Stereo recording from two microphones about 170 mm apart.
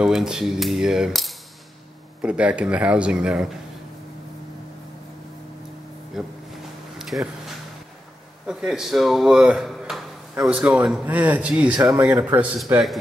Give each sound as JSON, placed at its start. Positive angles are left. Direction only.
{"t": 0.0, "sound": "cap gun", "side_deg": -5}
{"t": 2.2, "sound": "speech", "side_deg": -5}
{"t": 6.2, "sound": "cap gun", "side_deg": 0}
{"t": 7.0, "sound": "a sound", "side_deg": 0}
{"t": 8.5, "sound": "speech", "side_deg": -5}